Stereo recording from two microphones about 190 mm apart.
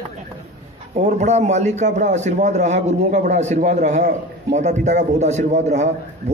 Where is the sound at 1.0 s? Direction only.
35° right (ahead or behind).